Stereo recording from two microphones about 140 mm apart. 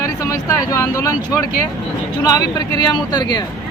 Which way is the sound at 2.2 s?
25° left (ahead or behind).